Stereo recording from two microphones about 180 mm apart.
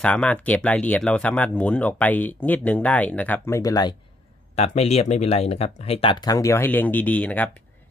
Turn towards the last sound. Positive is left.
turn(degrees=10)  # may be behind; listen again after turning